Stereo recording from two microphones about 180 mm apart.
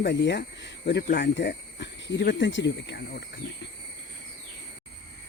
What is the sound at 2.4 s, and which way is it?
Speech, 90° left.